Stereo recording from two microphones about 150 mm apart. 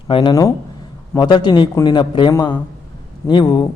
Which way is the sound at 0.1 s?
30° left (ahead or behind).